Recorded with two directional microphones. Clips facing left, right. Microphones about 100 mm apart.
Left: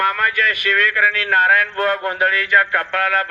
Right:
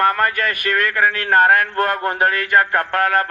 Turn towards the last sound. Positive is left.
turn(degrees=-40)  # may be behind; listen again after turning